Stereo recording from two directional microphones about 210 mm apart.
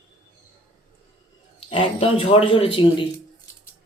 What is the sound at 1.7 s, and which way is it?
Speech, 25° left (ahead or behind).